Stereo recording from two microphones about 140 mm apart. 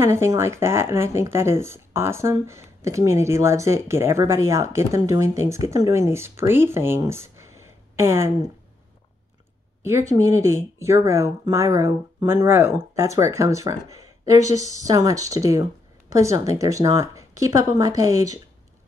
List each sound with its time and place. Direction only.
0.0 s speech: 20° right (ahead or behind)
9.8 s speech: 20° right (ahead or behind)